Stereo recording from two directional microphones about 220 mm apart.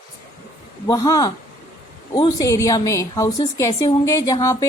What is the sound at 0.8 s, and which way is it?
A woman's voice, 15° left (ahead or behind).